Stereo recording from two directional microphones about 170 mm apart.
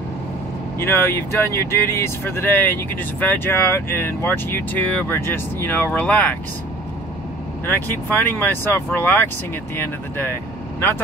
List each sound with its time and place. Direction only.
0.7 s speech: 15° left (ahead or behind)
7.6 s speech: 10° left (ahead or behind)